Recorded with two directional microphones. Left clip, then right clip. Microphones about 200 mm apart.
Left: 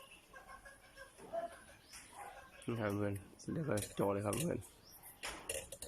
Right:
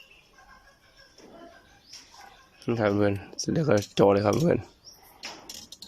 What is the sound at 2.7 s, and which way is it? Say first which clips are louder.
Speech: right 15 dB; 50° right (ahead or behind).